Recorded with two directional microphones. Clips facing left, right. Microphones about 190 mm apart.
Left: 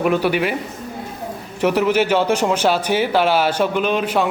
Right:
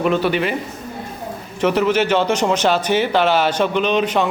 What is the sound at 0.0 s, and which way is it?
Speech, 10° left (ahead or behind).